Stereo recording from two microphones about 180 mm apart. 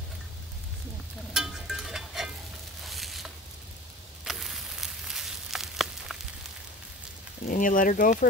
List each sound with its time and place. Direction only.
1.3 s music: 5° right (ahead or behind)
2.8 s a sound: centre (ahead or behind)
7.4 s speech: 45° left (ahead or behind)